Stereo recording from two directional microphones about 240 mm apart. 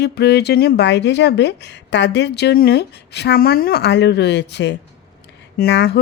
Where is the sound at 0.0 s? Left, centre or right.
Left.